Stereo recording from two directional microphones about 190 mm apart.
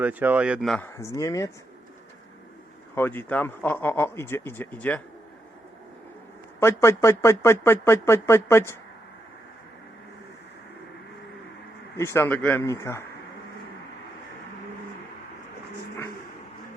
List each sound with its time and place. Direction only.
0.0 s speech: 10° right (ahead or behind)
0.9 s speech: 15° left (ahead or behind)
2.9 s speech: 10° left (ahead or behind)
6.6 s speech: 15° left (ahead or behind)
11.9 s speech: 15° left (ahead or behind)